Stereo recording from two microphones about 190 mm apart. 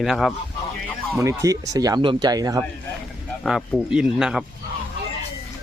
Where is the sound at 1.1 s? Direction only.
15° right (ahead or behind).